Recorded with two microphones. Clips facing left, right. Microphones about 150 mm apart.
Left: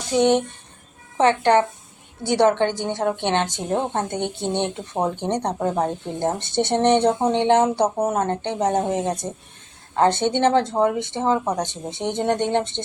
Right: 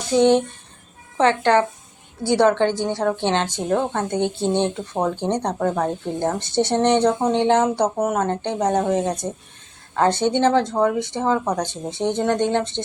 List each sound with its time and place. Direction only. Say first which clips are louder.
0.2 s speech: right 2 dB; 15° left (ahead or behind)